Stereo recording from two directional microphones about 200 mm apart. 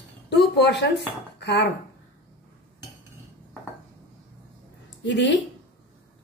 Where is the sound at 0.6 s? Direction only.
60° left (ahead or behind).